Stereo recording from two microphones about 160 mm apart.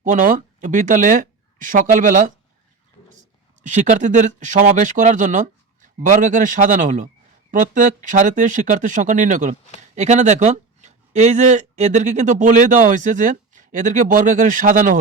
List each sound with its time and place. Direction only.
0.0 s speech: 50° right (ahead or behind)
3.6 s speech: 50° right (ahead or behind)